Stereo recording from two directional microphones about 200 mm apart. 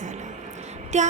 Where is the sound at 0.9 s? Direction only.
35° right (ahead or behind).